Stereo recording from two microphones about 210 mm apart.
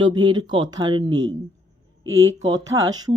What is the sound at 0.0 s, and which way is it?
Speech, 20° right (ahead or behind).